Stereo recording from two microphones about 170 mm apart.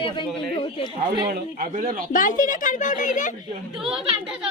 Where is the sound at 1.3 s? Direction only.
55° right (ahead or behind).